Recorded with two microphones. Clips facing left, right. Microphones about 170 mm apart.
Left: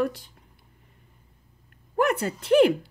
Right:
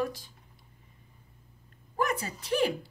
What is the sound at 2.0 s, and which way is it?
Speech, 65° left (ahead or behind).